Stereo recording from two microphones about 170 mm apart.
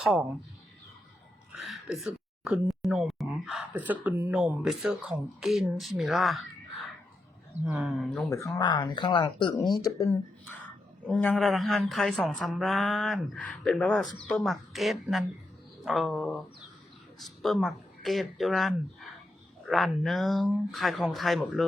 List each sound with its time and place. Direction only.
0.0 s a woman's voice: 5° right (ahead or behind)
1.6 s a woman's voice: centre (ahead or behind)
8.5 s a woman's voice: 25° left (ahead or behind); by 21.6 s centre (ahead or behind)